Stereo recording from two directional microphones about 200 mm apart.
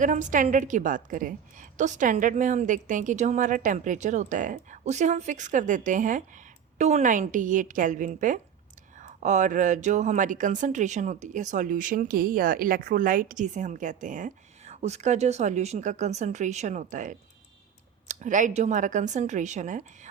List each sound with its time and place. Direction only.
0.0 s a woman's voice: 40° right (ahead or behind)